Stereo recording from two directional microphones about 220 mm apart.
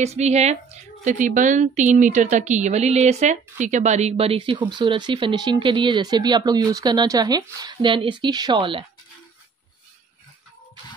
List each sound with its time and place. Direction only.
0.0 s speech: 30° right (ahead or behind)